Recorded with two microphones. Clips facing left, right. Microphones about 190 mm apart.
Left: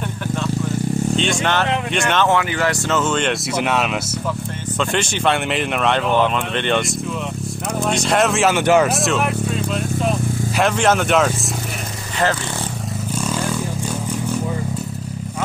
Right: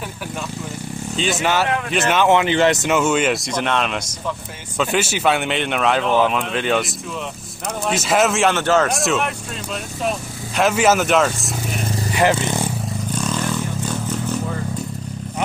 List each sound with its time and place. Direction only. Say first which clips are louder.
1.1 s speech: right 4 dB; 5° right (ahead or behind)
2.2 s speech: right 3 dB; 20° right (ahead or behind)
3.0 s speech: even; 5° right (ahead or behind)
3.5 s speech: left 1 dB; 5° left (ahead or behind)
4.7 s speech: right 2 dB; 5° right (ahead or behind)
7.9 s speech: right 1 dB; 5° right (ahead or behind)
8.5 s speech: left 3 dB; 10° left (ahead or behind)
8.9 s speech: left 1 dB; centre (ahead or behind)
10.6 s speech: right 1 dB; 5° right (ahead or behind)
13.1 s vehicle: left 1 dB; 10° left (ahead or behind)